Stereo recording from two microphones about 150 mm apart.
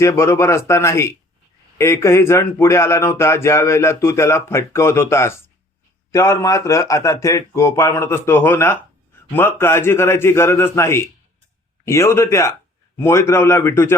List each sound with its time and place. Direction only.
0.0 s speech: 20° left (ahead or behind)